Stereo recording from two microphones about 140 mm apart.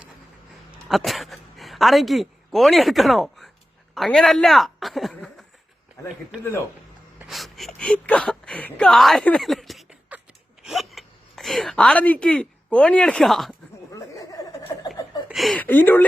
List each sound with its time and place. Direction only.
0.9 s a woman's voice: centre (ahead or behind)
7.3 s gasp: centre (ahead or behind)
7.8 s speech: 10° left (ahead or behind)
10.6 s a sound: centre (ahead or behind)
13.9 s snicker: 25° left (ahead or behind)
15.3 s a sound: centre (ahead or behind)
15.5 s speech: 15° left (ahead or behind)